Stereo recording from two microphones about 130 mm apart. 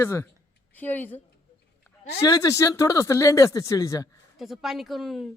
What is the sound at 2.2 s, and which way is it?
Speech, 25° left (ahead or behind).